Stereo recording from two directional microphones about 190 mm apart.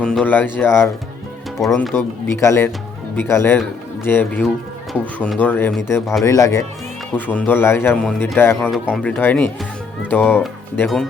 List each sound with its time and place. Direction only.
0.0 s speech: 5° left (ahead or behind)
1.6 s speech: centre (ahead or behind)
2.0 s speech: 15° left (ahead or behind)